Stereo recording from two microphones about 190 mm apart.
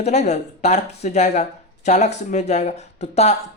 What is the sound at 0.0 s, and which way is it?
Speech, 35° left (ahead or behind).